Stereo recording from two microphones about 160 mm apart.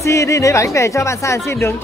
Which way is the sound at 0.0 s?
20° left (ahead or behind).